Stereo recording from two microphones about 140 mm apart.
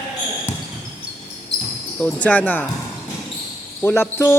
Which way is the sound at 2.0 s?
10° left (ahead or behind).